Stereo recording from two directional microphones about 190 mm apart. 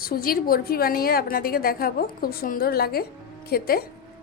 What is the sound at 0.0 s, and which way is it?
A woman's voice, 50° left (ahead or behind).